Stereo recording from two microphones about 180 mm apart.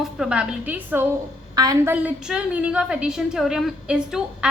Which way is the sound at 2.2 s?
5° right (ahead or behind).